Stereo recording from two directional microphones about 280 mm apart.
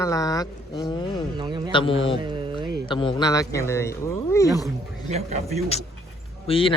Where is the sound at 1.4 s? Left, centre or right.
Centre.